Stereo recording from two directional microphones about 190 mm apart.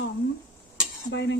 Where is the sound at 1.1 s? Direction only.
65° left (ahead or behind).